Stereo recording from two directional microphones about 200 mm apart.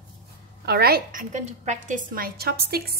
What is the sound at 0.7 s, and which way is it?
A woman's voice, 50° right (ahead or behind).